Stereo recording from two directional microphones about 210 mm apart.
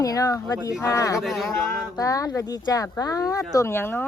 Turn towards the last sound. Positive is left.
turn(degrees=10)  # may be behind; listen again after turning